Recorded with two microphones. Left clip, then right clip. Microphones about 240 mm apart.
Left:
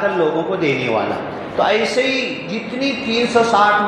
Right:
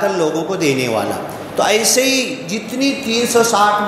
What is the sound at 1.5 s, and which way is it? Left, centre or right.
A man's voice, right.